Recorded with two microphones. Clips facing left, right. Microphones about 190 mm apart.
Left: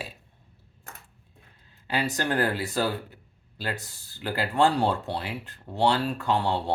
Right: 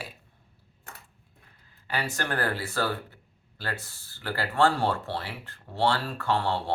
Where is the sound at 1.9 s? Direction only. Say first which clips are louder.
Left 4 dB; 20° left (ahead or behind).